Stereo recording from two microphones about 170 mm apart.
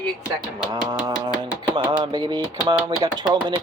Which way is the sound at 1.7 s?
30° right (ahead or behind).